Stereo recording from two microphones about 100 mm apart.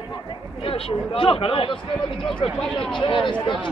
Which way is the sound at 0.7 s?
70° left (ahead or behind).